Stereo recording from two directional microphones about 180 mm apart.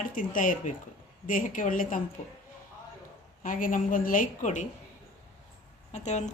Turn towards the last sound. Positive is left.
turn(degrees=40)  # may be behind; listen again after turning